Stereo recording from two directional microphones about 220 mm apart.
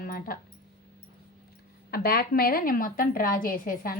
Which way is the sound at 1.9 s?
45° left (ahead or behind).